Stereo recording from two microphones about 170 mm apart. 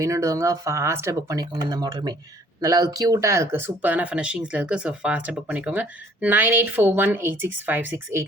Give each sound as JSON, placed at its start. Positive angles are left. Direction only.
{"t": 0.0, "sound": "speech", "side_deg": -20}